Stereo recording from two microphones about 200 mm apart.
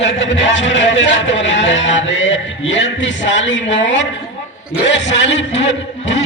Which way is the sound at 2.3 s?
65° left (ahead or behind).